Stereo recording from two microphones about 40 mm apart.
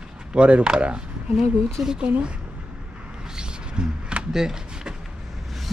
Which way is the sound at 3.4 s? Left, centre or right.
Right.